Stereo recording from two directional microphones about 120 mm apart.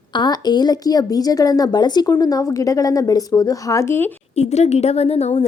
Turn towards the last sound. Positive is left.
turn(degrees=65)  # may be behind; listen again after turning